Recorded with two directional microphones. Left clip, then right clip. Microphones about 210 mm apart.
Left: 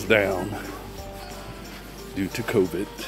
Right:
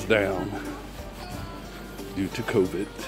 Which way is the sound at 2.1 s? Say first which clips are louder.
Left 1 dB; 15° left (ahead or behind).